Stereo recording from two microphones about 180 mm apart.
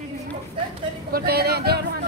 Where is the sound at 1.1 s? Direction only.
60° right (ahead or behind).